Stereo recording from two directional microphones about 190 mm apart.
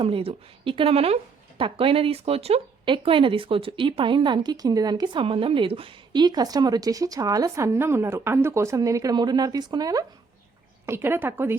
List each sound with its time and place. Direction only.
0.0 s a woman's voice: 30° right (ahead or behind); by 11.5 s 10° right (ahead or behind)